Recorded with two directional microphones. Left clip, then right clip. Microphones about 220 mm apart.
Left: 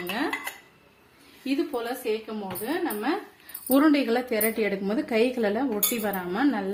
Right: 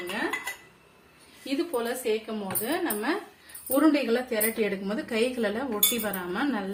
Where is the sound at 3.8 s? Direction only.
50° left (ahead or behind).